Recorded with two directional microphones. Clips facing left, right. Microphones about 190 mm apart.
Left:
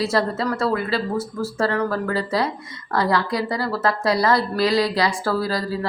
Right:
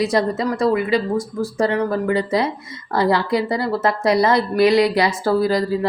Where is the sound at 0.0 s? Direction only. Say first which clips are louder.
Right 3 dB; 20° right (ahead or behind).